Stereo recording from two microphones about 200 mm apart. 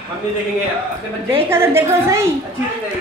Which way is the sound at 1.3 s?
10° right (ahead or behind).